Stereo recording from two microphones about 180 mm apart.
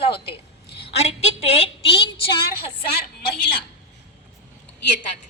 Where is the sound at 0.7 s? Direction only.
65° left (ahead or behind).